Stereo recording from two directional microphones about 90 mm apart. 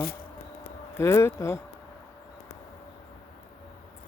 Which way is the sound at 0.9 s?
30° left (ahead or behind).